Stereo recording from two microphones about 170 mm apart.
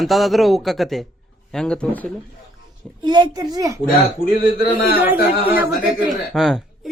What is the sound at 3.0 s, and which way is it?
Speech, 25° right (ahead or behind).